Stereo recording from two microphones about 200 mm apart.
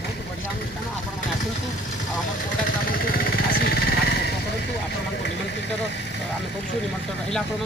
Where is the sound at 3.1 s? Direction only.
50° left (ahead or behind).